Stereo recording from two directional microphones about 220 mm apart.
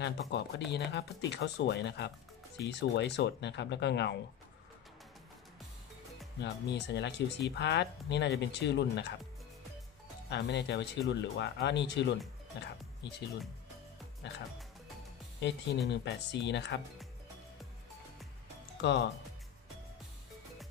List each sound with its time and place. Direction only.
0.0 s speech: 50° left (ahead or behind)
6.4 s speech: 50° left (ahead or behind)
10.3 s speech: 50° left (ahead or behind)
14.2 s speech: 50° left (ahead or behind)
15.4 s speech: 50° left (ahead or behind)
18.8 s speech: 50° left (ahead or behind)